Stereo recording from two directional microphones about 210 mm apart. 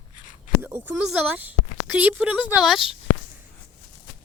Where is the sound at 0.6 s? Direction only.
10° right (ahead or behind).